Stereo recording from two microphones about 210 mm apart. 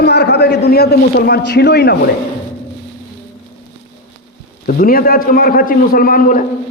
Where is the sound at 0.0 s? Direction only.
50° left (ahead or behind).